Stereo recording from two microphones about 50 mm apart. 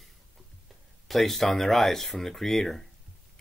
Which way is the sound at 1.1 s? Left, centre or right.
Centre.